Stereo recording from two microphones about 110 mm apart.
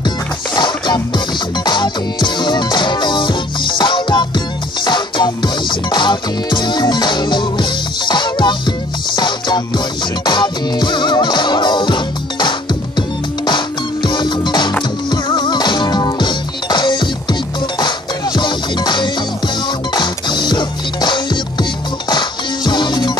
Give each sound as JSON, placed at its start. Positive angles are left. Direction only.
{"t": 0.6, "sound": "music", "side_deg": 45}
{"t": 14.0, "sound": "music", "side_deg": 45}
{"t": 22.7, "sound": "music", "side_deg": 45}